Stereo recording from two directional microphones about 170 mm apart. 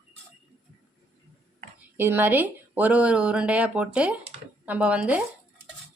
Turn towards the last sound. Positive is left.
turn(degrees=-5)  # may be behind; listen again after turning